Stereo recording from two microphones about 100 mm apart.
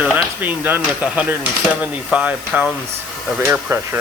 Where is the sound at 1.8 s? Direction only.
10° right (ahead or behind).